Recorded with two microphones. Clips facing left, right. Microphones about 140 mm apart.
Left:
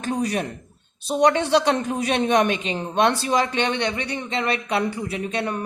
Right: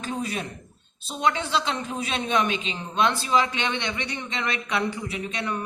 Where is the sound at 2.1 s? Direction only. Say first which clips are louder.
Left 5 dB; 60° left (ahead or behind).